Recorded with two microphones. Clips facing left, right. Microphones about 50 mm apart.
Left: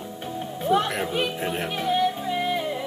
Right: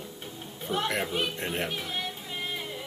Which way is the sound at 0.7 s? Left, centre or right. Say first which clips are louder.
Left 9 dB; centre.